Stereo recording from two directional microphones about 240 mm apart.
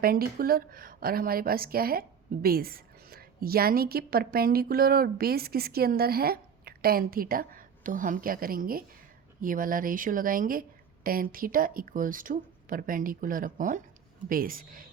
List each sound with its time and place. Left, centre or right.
0.0 s a woman's voice: right